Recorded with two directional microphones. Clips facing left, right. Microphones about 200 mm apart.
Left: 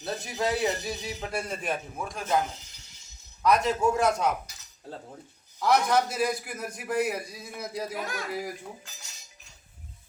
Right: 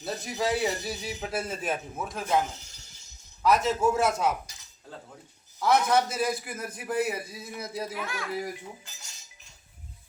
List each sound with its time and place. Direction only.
0.0 s a man's voice: centre (ahead or behind)
3.4 s a man's voice: 5° right (ahead or behind)
5.5 s a man's voice: centre (ahead or behind)
7.9 s speech: 40° left (ahead or behind)
8.3 s a man's voice: centre (ahead or behind)